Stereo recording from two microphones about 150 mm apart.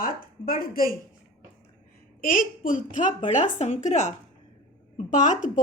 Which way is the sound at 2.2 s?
65° left (ahead or behind).